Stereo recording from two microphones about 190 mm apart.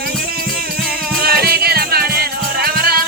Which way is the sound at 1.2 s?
55° right (ahead or behind).